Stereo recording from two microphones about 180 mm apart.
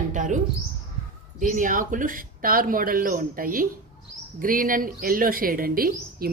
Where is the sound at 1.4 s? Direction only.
45° right (ahead or behind).